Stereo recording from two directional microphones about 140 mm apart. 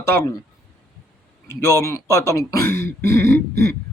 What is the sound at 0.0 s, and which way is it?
Speech, 20° left (ahead or behind).